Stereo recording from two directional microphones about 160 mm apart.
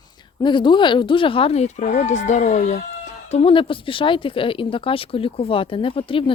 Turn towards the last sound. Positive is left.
turn(degrees=35)  # may be behind; listen again after turning